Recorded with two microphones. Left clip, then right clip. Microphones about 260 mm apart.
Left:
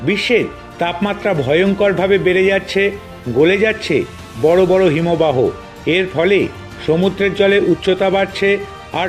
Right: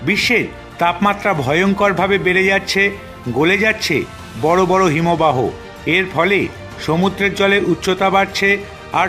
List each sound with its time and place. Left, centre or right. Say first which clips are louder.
0.0 s speech: even; centre